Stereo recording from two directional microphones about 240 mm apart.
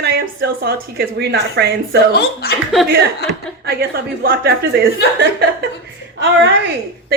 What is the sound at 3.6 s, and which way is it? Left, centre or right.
Speech, right.